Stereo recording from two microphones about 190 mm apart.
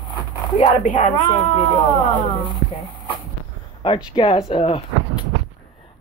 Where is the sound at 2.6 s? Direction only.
50° left (ahead or behind).